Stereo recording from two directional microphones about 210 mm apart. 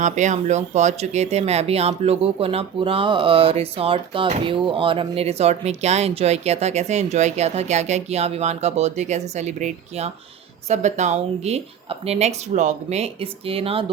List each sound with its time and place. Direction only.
0.0 s speech: 35° right (ahead or behind)